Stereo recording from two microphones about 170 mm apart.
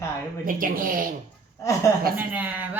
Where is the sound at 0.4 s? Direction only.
55° right (ahead or behind).